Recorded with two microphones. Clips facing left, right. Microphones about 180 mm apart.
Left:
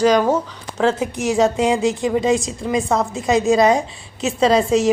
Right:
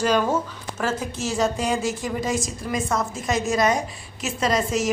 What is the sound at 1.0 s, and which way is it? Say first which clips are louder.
A woman's voice: left 7 dB; 15° left (ahead or behind).